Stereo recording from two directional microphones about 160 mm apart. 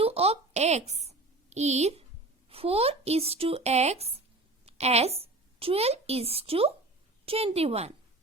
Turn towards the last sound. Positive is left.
turn(degrees=-40)  # may be behind; listen again after turning